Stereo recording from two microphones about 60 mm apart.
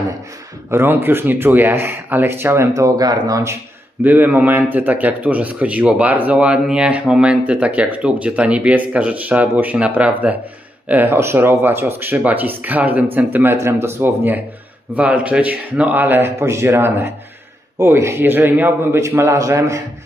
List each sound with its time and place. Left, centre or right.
0.7 s speech: right
2.7 s speech: right
4.0 s speech: right
13.6 s speech: right
15.0 s speech: right
17.8 s speech: right
18.2 s speech: right
19.5 s a man's voice: right